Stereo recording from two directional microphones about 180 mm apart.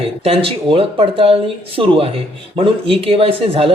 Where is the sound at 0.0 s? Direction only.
30° right (ahead or behind).